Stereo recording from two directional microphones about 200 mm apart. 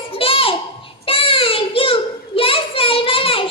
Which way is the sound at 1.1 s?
30° left (ahead or behind).